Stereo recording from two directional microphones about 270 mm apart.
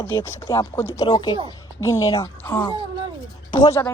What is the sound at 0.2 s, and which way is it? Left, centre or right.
Speech, centre.